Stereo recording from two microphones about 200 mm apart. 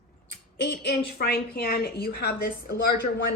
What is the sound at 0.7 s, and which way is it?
Speech, 55° left (ahead or behind).